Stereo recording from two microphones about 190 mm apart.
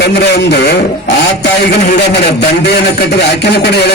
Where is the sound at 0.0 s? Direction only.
60° left (ahead or behind).